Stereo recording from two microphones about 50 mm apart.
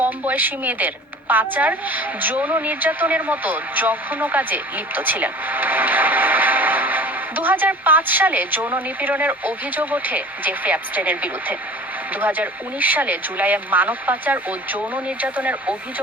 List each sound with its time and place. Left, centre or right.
0.0 s a woman's voice: right